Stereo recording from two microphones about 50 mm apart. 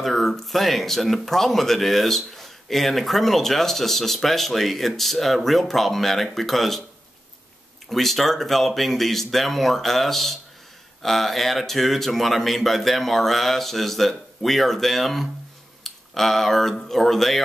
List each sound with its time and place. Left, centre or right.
0.0 s speech: centre
7.9 s speech: centre